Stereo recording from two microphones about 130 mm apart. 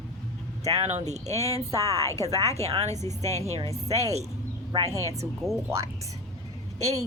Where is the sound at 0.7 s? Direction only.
60° right (ahead or behind).